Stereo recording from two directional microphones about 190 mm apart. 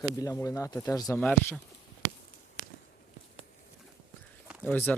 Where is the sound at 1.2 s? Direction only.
5° left (ahead or behind).